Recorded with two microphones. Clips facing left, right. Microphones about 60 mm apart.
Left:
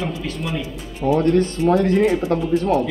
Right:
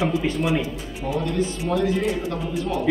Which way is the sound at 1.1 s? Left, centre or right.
Left.